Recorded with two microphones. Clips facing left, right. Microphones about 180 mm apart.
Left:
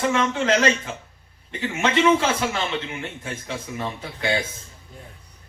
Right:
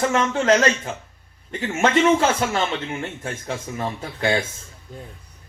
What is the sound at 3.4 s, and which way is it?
Speech, 45° right (ahead or behind).